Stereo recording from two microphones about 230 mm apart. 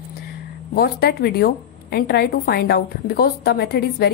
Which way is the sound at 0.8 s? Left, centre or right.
Left.